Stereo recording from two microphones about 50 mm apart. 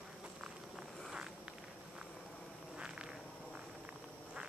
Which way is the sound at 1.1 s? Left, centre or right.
Centre.